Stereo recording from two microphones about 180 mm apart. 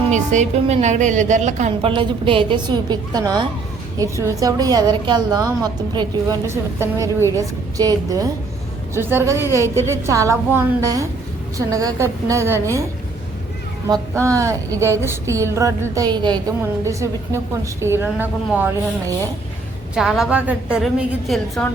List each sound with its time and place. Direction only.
0.1 s a woman's voice: 40° right (ahead or behind); by 12.5 s 15° right (ahead or behind)
13.8 s a woman's voice: 20° right (ahead or behind)
20.0 s a woman's voice: centre (ahead or behind)